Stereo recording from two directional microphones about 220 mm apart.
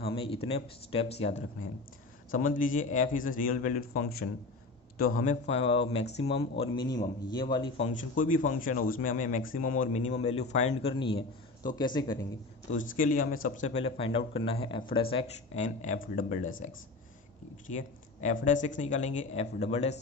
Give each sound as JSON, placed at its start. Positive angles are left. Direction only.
{"t": 0.0, "sound": "a sound", "side_deg": 25}
{"t": 0.4, "sound": "a man's voice", "side_deg": 25}
{"t": 8.1, "sound": "a man's voice", "side_deg": 35}
{"t": 12.7, "sound": "a man's voice", "side_deg": 35}
{"t": 17.7, "sound": "a man's voice", "side_deg": 35}